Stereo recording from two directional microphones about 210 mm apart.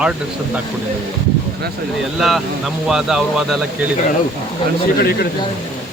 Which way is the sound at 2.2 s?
Centre (ahead or behind).